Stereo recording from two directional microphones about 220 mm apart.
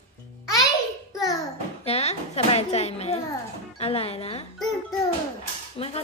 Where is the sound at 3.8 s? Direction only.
25° left (ahead or behind).